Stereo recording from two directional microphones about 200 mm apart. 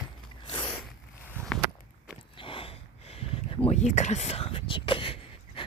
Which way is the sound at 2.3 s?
25° left (ahead or behind).